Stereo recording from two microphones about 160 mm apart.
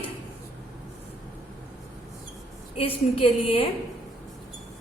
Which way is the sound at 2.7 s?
35° left (ahead or behind).